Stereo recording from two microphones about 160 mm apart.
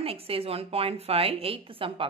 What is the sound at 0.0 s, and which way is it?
Speech, 35° right (ahead or behind).